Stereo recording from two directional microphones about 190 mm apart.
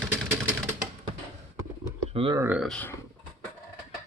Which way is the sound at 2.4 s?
10° right (ahead or behind).